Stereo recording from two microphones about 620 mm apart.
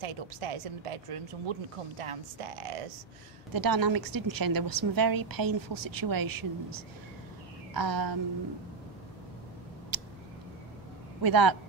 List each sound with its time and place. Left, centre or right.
0.0 s speech: right
3.5 s a woman's voice: right
9.9 s a sound: right
11.2 s a woman's voice: right